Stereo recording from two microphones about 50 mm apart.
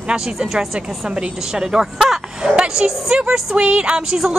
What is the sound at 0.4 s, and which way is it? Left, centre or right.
Speech, centre.